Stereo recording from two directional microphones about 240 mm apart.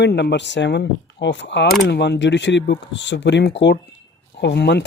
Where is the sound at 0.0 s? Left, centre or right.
Left.